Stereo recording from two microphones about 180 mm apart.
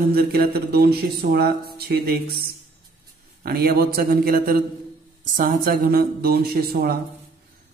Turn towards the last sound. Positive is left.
turn(degrees=-55)  # may be behind; listen again after turning